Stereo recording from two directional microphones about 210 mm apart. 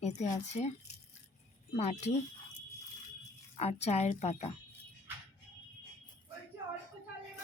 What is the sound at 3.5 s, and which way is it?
Speech, 30° left (ahead or behind).